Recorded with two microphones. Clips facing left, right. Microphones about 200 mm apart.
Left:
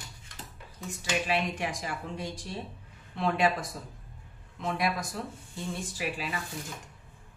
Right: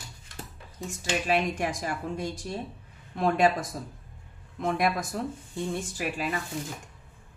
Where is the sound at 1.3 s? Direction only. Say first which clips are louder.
Right 4 dB; 45° right (ahead or behind).